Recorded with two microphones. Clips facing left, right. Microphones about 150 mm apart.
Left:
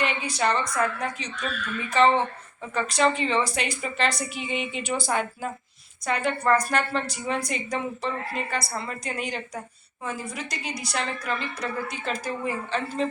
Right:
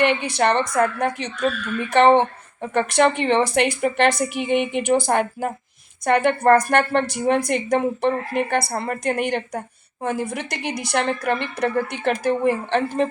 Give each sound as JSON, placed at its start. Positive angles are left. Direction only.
{"t": 0.0, "sound": "a woman's voice", "side_deg": -65}